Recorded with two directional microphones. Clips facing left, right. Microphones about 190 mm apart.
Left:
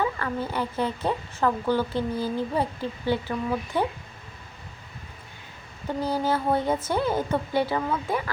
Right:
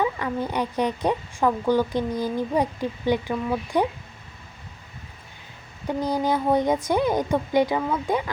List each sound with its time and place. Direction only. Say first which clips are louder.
0.0 s speech: right 2 dB; 15° right (ahead or behind)
6.1 s speech: right 2 dB; 15° right (ahead or behind)